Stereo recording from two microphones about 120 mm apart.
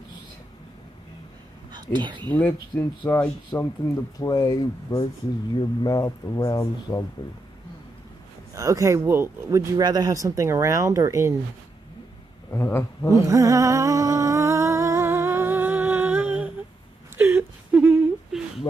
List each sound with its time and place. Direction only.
1.7 s speech: 40° right (ahead or behind)
2.2 s speech: 15° left (ahead or behind)
3.5 s speech: 25° left (ahead or behind)
5.6 s speech: 35° left (ahead or behind)
8.5 s speech: 25° right (ahead or behind)
12.4 s speech: 20° left (ahead or behind)
13.1 s music: 25° right (ahead or behind)
17.2 s whimper: 15° right (ahead or behind)